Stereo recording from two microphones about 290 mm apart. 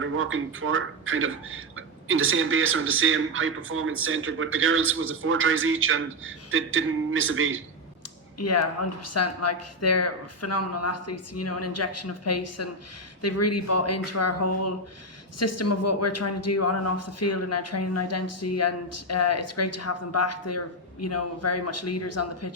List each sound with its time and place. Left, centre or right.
0.0 s a man's voice: right
8.4 s speech: left